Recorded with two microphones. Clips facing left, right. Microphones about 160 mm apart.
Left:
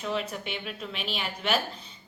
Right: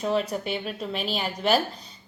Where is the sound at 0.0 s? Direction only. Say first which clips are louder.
Right 6 dB; 40° right (ahead or behind).